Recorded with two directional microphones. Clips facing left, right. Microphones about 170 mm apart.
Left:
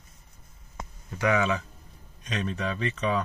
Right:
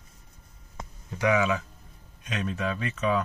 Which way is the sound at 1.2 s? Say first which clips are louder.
Right 1 dB; 10° right (ahead or behind).